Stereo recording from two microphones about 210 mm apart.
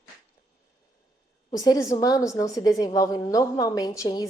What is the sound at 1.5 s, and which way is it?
A woman's voice, 20° left (ahead or behind).